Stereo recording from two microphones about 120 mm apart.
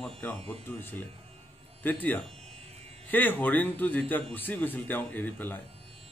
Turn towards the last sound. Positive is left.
turn(degrees=15)  # may be behind; listen again after turning